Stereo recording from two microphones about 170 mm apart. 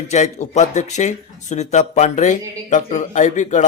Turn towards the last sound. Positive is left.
turn(degrees=45)  # may be behind; listen again after turning